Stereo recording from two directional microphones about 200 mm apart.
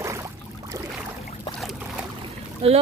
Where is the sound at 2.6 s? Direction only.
30° right (ahead or behind).